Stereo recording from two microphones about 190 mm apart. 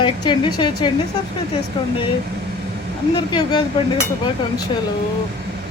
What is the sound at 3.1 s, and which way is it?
Speech, 20° left (ahead or behind).